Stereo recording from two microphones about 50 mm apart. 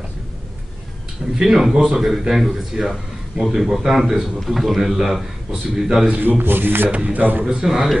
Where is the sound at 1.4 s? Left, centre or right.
Centre.